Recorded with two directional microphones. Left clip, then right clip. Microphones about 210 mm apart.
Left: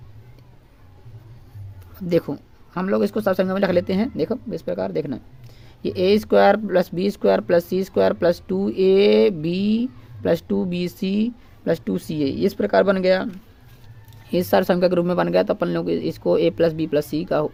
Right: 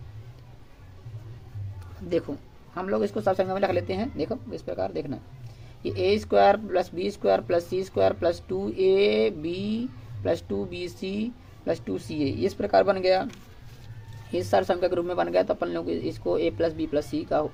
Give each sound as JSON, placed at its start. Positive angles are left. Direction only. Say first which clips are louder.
{"t": 2.0, "sound": "speech", "louder": "left 7 dB", "side_deg": 45}
{"t": 14.3, "sound": "speech", "louder": "left 5 dB", "side_deg": 55}